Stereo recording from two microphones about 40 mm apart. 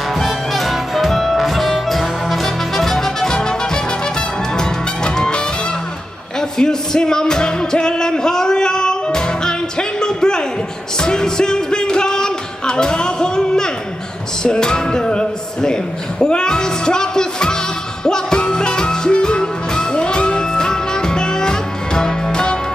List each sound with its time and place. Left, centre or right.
0.1 s music: centre; by 5.4 s left
6.6 s music: centre